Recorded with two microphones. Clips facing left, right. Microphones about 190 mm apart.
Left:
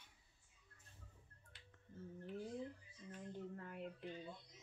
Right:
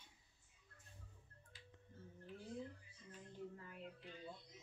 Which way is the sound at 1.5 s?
60° left (ahead or behind).